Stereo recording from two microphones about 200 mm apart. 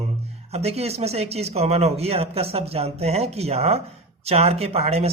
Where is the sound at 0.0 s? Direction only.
30° right (ahead or behind).